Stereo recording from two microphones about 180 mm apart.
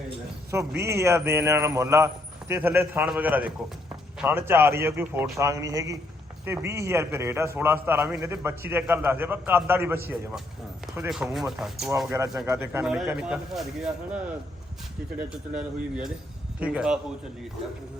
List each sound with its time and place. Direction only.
0.8 s a man's voice: 15° right (ahead or behind)
12.1 s a man's voice: 15° right (ahead or behind)
15.5 s a man's voice: 5° right (ahead or behind)